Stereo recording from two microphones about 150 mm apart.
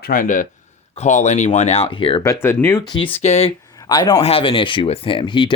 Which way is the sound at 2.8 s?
30° left (ahead or behind).